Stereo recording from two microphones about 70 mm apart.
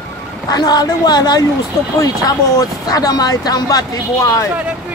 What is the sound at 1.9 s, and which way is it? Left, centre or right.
Speech, left.